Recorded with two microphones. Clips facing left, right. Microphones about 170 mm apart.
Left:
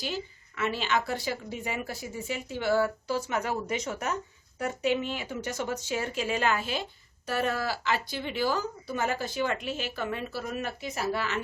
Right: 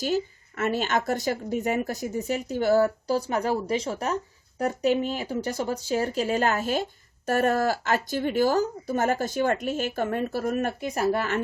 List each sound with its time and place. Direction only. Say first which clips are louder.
0.0 s speech: right 9 dB; 45° right (ahead or behind)